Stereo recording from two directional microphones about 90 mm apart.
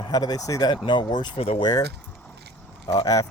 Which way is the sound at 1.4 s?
75° left (ahead or behind).